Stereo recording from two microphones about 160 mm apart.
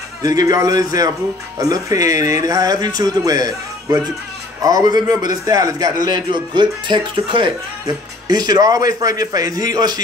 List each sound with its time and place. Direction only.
0.2 s a man's voice: 25° right (ahead or behind)